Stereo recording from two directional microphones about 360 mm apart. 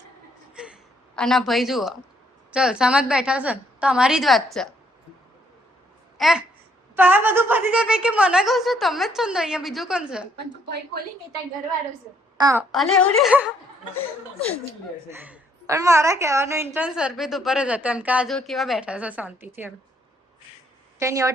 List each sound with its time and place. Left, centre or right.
0.5 s a sound: centre
2.5 s a woman's voice: centre
6.1 s a woman's voice: centre
10.3 s a woman's voice: right
12.4 s a woman's voice: centre
15.1 s a woman's voice: centre
21.0 s a woman's voice: centre